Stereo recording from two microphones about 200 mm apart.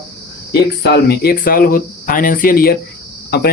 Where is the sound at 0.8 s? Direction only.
55° left (ahead or behind).